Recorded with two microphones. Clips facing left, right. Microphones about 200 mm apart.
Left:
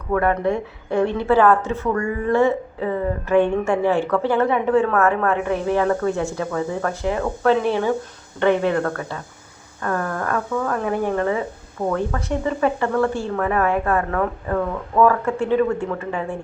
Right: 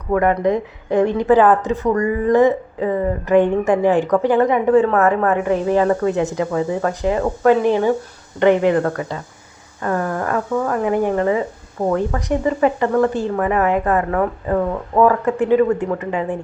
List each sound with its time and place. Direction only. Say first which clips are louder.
0.1 s a woman's voice: right 3 dB; 15° right (ahead or behind)